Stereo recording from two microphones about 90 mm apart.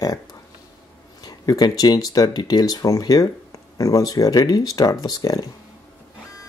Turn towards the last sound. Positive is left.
turn(degrees=45)  # may be behind; listen again after turning